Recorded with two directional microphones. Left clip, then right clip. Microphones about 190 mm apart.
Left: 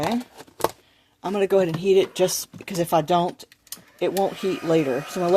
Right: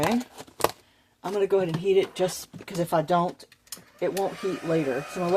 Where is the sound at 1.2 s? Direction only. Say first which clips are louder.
Left 4 dB; 40° left (ahead or behind).